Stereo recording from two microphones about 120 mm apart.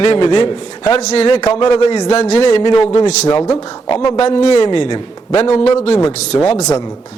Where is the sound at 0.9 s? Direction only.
55° left (ahead or behind).